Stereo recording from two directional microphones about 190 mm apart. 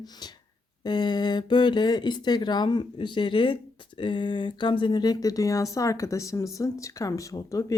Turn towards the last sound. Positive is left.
turn(degrees=15)  # may be behind; listen again after turning